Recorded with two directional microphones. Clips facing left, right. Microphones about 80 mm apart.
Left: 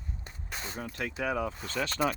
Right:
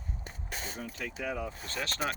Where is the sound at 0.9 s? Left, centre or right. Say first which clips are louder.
Left 6 dB; left.